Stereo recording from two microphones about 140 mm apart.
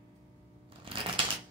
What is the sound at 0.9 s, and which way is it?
Typewriter, 40° right (ahead or behind).